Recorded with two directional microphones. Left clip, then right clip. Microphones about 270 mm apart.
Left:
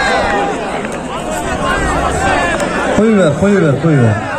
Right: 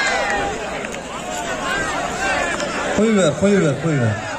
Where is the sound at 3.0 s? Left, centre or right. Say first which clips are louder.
Left 3 dB; right.